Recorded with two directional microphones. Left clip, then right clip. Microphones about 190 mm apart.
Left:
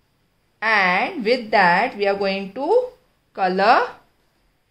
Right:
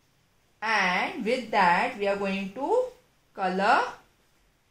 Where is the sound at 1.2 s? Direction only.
55° left (ahead or behind).